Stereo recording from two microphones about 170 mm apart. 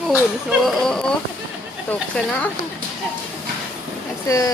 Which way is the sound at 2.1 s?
5° left (ahead or behind).